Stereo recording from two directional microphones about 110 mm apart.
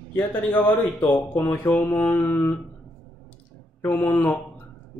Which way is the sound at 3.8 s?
20° left (ahead or behind).